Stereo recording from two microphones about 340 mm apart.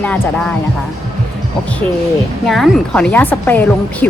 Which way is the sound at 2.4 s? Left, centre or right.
Centre.